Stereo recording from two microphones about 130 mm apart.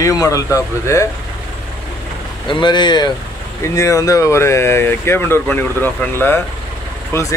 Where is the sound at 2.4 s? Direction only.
40° left (ahead or behind).